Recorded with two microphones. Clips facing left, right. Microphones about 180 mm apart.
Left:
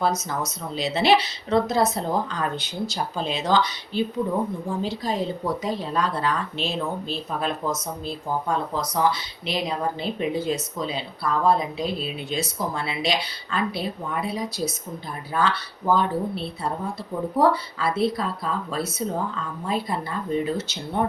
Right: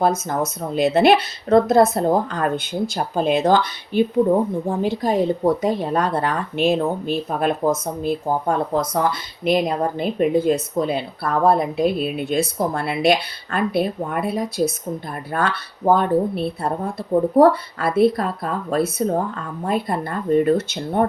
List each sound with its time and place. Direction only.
0.0 s speech: 50° right (ahead or behind)